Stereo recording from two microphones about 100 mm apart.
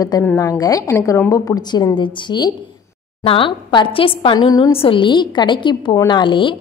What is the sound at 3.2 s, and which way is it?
A woman's voice, 65° left (ahead or behind).